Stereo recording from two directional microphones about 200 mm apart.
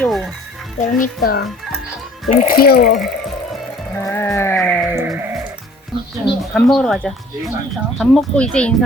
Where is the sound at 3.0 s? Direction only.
Centre (ahead or behind).